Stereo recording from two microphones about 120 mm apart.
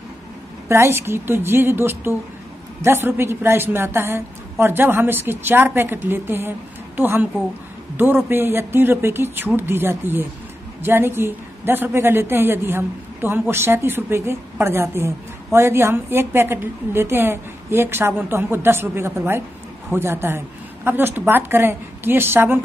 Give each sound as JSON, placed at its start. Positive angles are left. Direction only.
{"t": 0.7, "sound": "a woman's voice", "side_deg": -20}
{"t": 8.3, "sound": "a woman's voice", "side_deg": -20}